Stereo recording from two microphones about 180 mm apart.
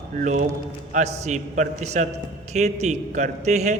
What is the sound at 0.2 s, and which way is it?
A man's voice, 45° right (ahead or behind).